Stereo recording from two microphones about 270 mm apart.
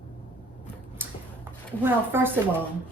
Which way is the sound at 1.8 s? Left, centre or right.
Centre.